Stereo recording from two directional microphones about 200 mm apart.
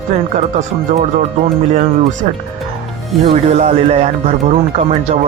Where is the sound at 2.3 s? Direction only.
35° right (ahead or behind).